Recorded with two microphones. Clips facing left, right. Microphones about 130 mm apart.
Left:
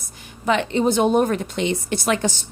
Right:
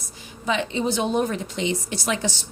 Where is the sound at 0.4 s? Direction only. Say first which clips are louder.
Left 5 dB; 60° left (ahead or behind).